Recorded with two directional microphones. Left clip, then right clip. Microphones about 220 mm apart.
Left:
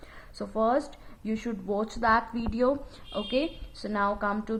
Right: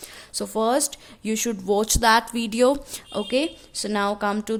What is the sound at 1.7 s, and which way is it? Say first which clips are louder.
A woman's voice: right 7 dB; 60° right (ahead or behind).